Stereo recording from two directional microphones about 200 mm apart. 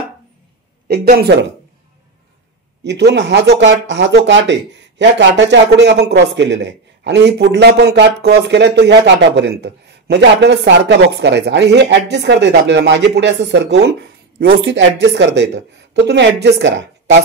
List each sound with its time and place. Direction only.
1.0 s speech: 50° right (ahead or behind)
2.8 s speech: 60° right (ahead or behind)
14.4 s speech: 70° right (ahead or behind)